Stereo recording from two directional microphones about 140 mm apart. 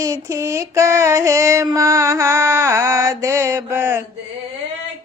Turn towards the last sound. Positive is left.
turn(degrees=-15)  # may be behind; listen again after turning